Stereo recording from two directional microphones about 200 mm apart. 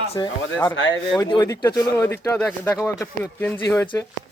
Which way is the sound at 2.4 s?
5° left (ahead or behind).